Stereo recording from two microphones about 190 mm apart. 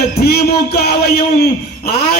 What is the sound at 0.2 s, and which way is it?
A man's voice, 55° left (ahead or behind).